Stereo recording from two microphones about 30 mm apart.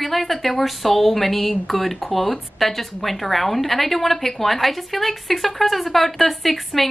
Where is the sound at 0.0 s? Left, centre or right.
Centre.